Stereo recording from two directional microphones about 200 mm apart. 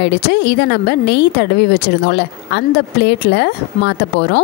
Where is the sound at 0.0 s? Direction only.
60° left (ahead or behind).